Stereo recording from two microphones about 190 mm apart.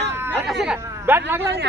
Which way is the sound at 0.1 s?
10° right (ahead or behind).